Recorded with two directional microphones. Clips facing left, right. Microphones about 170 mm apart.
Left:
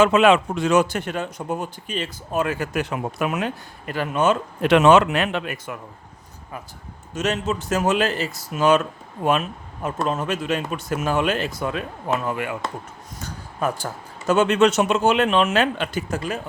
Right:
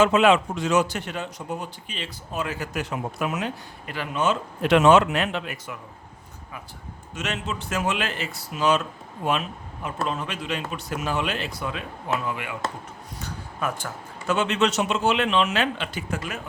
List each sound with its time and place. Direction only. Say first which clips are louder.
0.0 s a man's voice: left 3 dB; 60° left (ahead or behind)
7.1 s speech: left 7 dB; 40° left (ahead or behind)
10.1 s speech: left 6 dB; 45° left (ahead or behind)